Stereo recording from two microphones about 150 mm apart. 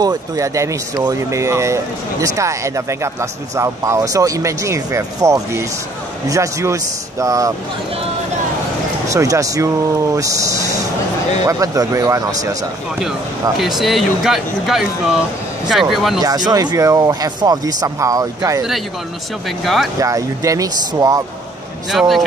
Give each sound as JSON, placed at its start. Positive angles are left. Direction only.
{"t": 0.0, "sound": "speech", "side_deg": -25}
{"t": 9.1, "sound": "speech", "side_deg": -20}
{"t": 13.6, "sound": "speech", "side_deg": 0}
{"t": 16.2, "sound": "speech", "side_deg": -25}
{"t": 19.4, "sound": "speech", "side_deg": 0}
{"t": 20.0, "sound": "speech", "side_deg": -20}
{"t": 21.9, "sound": "speech", "side_deg": 0}